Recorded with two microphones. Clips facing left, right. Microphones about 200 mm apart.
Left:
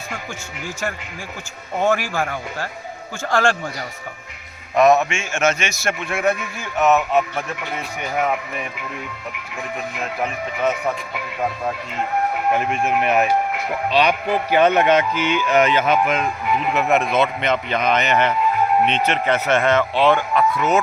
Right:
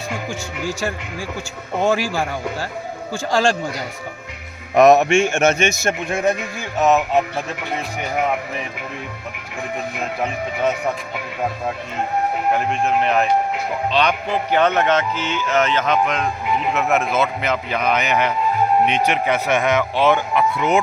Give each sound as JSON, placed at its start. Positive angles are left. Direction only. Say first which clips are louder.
{"t": 1.8, "sound": "a man's voice", "louder": "right 1 dB", "side_deg": -10}
{"t": 4.8, "sound": "a man's voice", "louder": "right 3 dB", "side_deg": -40}
{"t": 5.1, "sound": "a man's voice", "louder": "right 5 dB", "side_deg": -55}
{"t": 5.8, "sound": "speech", "louder": "right 1 dB", "side_deg": -20}
{"t": 12.5, "sound": "a man's voice", "louder": "right 1 dB", "side_deg": 5}